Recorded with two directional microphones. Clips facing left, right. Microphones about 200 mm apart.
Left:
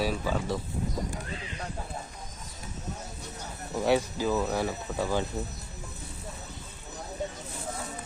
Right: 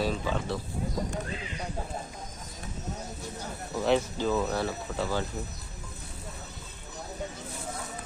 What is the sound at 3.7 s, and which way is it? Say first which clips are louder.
Speech: even; 10° left (ahead or behind).